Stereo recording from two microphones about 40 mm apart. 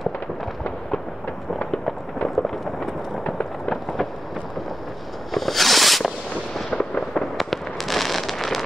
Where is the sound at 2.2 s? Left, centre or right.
Centre.